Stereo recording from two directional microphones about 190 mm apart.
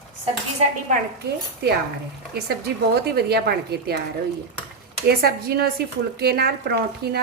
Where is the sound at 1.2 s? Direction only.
60° right (ahead or behind).